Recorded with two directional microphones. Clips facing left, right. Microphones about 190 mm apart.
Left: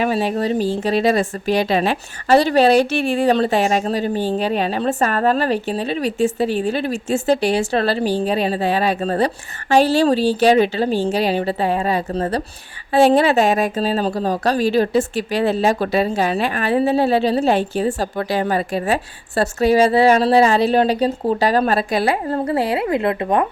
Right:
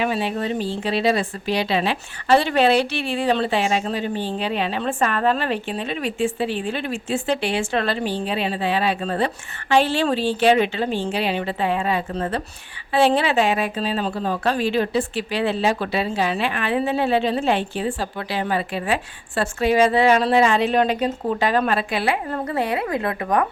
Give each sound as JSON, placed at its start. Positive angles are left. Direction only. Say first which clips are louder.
{"t": 0.0, "sound": "a woman's voice", "louder": "left 4 dB", "side_deg": 40}